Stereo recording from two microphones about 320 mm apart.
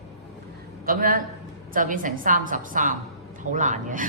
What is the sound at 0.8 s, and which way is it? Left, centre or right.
A man's voice, right.